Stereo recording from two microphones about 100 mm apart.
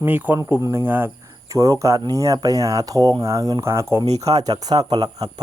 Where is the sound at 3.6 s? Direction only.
25° right (ahead or behind).